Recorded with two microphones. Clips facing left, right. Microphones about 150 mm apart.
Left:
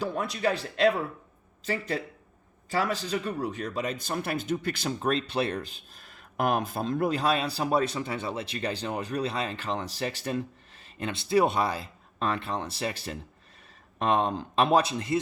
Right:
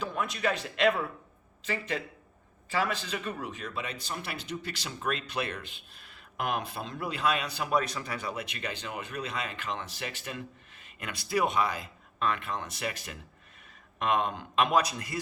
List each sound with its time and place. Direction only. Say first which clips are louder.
0.0 s speech: left 3 dB; 35° left (ahead or behind); by 4.9 s 50° left (ahead or behind)
5.0 s speech: left 5 dB; 30° left (ahead or behind)